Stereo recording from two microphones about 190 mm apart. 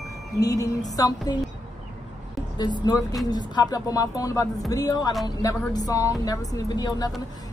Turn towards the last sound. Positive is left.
turn(degrees=20)  # may be behind; listen again after turning